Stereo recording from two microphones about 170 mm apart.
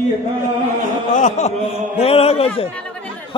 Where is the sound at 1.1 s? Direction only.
45° left (ahead or behind).